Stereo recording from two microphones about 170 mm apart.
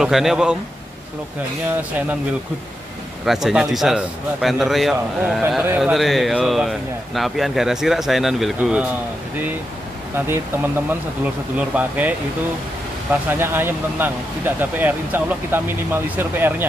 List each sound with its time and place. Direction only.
0.0 s a man's voice: centre (ahead or behind)
1.8 s speech: 10° right (ahead or behind)
3.3 s a man's voice: centre (ahead or behind)
10.1 s speech: 15° right (ahead or behind)
11.5 s speech: 10° right (ahead or behind)
13.3 s speech: 10° right (ahead or behind)